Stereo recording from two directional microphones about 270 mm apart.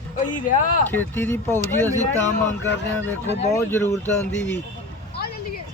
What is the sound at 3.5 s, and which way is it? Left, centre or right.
Speech, centre.